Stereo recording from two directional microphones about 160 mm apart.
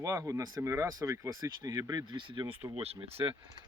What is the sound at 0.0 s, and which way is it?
Speech, 20° right (ahead or behind).